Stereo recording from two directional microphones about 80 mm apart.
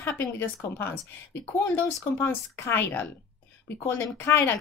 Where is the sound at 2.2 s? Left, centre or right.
Left.